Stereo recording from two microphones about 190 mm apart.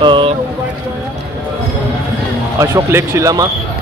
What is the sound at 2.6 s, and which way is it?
Speech, 15° right (ahead or behind).